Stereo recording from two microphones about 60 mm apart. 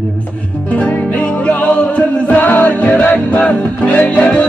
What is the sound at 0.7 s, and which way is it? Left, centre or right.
Music, left.